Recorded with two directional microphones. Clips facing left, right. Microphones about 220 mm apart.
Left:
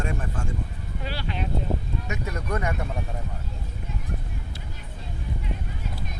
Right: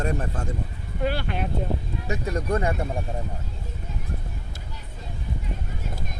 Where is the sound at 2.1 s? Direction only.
30° right (ahead or behind).